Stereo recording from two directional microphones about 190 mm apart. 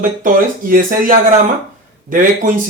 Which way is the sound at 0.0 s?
45° right (ahead or behind).